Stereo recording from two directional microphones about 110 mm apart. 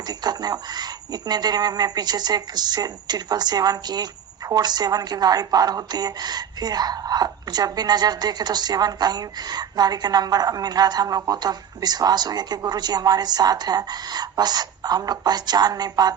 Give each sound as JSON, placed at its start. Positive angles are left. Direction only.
{"t": 0.1, "sound": "speech", "side_deg": -40}